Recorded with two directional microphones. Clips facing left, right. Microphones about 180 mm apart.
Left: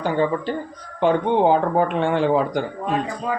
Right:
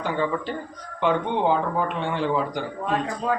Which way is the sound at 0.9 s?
40° left (ahead or behind).